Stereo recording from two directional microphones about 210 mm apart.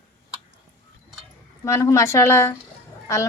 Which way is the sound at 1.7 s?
15° left (ahead or behind).